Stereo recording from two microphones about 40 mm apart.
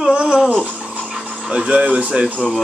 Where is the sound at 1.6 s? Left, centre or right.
Right.